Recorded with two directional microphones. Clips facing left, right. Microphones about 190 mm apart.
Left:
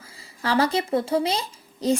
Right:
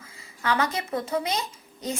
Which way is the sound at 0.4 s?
30° left (ahead or behind).